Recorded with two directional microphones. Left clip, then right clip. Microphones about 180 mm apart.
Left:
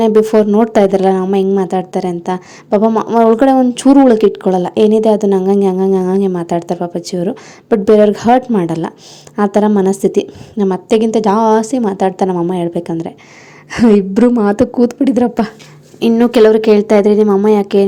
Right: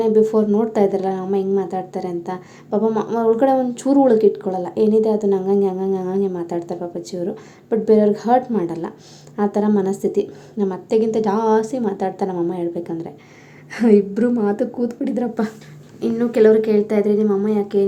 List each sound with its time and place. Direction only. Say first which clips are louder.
0.0 s a woman's voice: left 6 dB; 50° left (ahead or behind)